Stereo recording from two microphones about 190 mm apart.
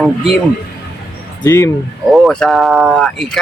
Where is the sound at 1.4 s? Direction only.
20° left (ahead or behind).